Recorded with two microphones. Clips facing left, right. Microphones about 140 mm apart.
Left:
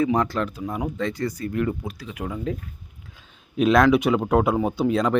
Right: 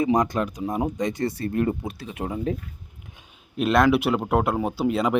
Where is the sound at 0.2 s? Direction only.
15° right (ahead or behind).